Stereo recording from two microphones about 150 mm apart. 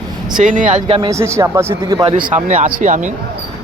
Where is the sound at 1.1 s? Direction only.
20° right (ahead or behind).